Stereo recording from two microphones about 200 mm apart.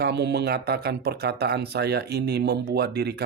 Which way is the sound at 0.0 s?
55° right (ahead or behind).